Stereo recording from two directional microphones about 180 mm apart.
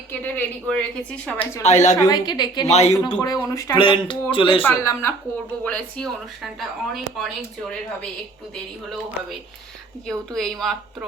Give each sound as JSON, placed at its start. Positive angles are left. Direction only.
{"t": 0.1, "sound": "a woman's voice", "side_deg": 10}
{"t": 1.6, "sound": "speech", "side_deg": 40}
{"t": 2.0, "sound": "speech", "side_deg": 20}
{"t": 2.6, "sound": "speech", "side_deg": 35}
{"t": 3.2, "sound": "a woman's voice", "side_deg": 15}
{"t": 3.8, "sound": "speech", "side_deg": 30}
{"t": 4.6, "sound": "a woman's voice", "side_deg": 15}
{"t": 10.1, "sound": "speech", "side_deg": 0}